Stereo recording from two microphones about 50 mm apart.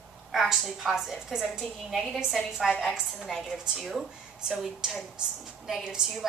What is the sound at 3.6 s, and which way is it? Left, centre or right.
A woman's voice, centre.